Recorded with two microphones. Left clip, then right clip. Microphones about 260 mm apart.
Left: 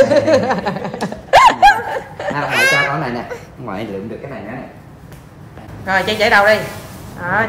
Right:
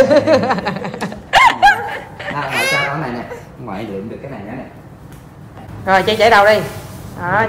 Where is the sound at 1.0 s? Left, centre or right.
Centre.